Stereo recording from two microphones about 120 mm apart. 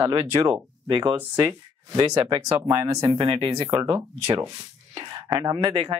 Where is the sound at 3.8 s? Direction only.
25° right (ahead or behind).